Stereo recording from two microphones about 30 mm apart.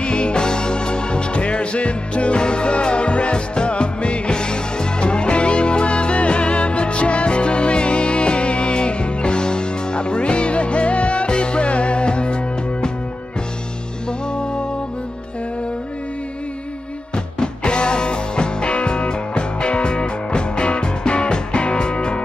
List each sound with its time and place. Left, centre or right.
0.0 s music: left
17.1 s music: left